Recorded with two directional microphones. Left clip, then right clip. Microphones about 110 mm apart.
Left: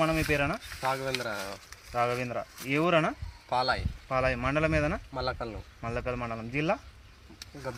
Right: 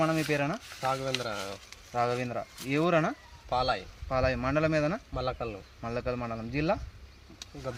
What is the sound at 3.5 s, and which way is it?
Speech, 40° right (ahead or behind).